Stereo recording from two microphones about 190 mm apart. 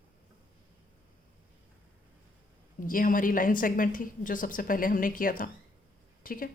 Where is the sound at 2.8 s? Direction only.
45° left (ahead or behind).